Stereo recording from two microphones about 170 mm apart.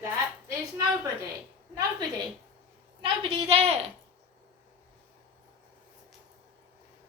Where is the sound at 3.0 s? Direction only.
30° right (ahead or behind).